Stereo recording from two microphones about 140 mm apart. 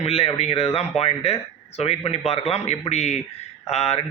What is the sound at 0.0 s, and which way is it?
Speech, 45° left (ahead or behind).